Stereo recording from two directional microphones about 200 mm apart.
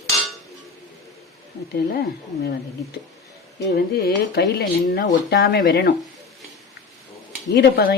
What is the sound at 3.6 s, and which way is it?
A woman's voice, 55° left (ahead or behind).